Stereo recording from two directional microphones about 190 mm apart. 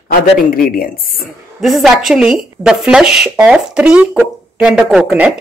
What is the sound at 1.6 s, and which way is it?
A woman's voice, centre (ahead or behind).